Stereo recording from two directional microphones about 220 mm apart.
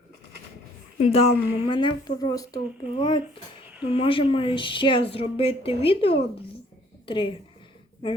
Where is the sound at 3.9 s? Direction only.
25° left (ahead or behind).